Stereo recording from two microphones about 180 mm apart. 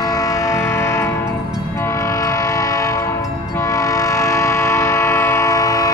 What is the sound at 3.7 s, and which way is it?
Train, 20° left (ahead or behind).